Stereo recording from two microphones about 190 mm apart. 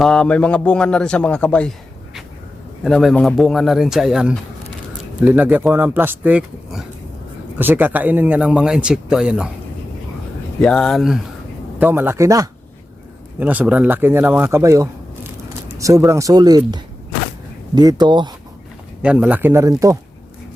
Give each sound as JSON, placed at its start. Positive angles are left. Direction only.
{"t": 0.0, "sound": "a man's voice", "side_deg": 5}
{"t": 2.8, "sound": "a man's voice", "side_deg": 0}
{"t": 10.6, "sound": "a man's voice", "side_deg": 5}
{"t": 11.8, "sound": "speech", "side_deg": -10}
{"t": 19.0, "sound": "speech", "side_deg": -10}